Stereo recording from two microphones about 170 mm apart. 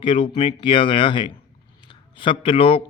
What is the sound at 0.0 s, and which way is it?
Speech, 30° left (ahead or behind).